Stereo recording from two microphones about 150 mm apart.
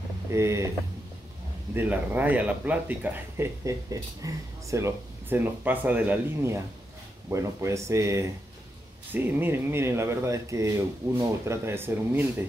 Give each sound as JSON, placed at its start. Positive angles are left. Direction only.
{"t": 0.3, "sound": "speech", "side_deg": -20}
{"t": 1.7, "sound": "speech", "side_deg": -10}